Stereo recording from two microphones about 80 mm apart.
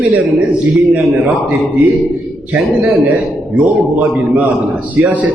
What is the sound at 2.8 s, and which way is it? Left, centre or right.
Speech, centre.